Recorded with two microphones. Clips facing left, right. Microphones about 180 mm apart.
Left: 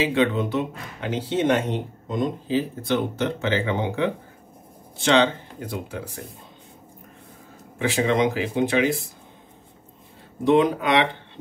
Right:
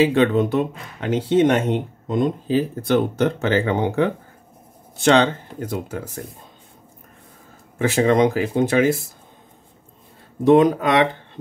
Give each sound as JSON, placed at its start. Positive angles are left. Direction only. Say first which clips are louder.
{"t": 0.0, "sound": "speech", "louder": "right 5 dB", "side_deg": -50}
{"t": 7.8, "sound": "speech", "louder": "right 4 dB", "side_deg": -45}
{"t": 10.4, "sound": "speech", "louder": "right 5 dB", "side_deg": -45}